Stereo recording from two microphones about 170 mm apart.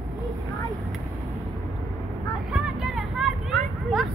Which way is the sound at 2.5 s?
5° right (ahead or behind).